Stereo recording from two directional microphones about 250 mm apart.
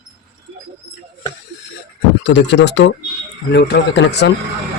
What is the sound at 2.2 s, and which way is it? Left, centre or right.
Speech, left.